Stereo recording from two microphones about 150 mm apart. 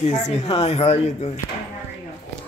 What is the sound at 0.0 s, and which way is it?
Speech, 45° left (ahead or behind).